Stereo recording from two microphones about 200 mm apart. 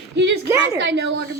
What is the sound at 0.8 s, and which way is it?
Speech, 60° right (ahead or behind).